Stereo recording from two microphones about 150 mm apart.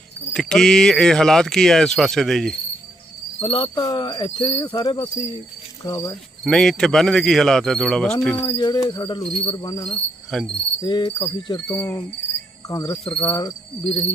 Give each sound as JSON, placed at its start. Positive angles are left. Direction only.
{"t": 0.3, "sound": "speech", "side_deg": 5}
{"t": 3.4, "sound": "speech", "side_deg": 35}
{"t": 5.1, "sound": "cricket", "side_deg": 40}
{"t": 5.8, "sound": "speech", "side_deg": 25}
{"t": 6.4, "sound": "speech", "side_deg": 5}
{"t": 8.4, "sound": "speech", "side_deg": 25}
{"t": 9.9, "sound": "speech", "side_deg": 5}
{"t": 10.8, "sound": "speech", "side_deg": 30}